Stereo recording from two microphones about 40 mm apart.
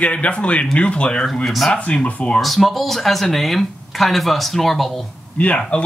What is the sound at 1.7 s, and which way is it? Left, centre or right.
Speech, left.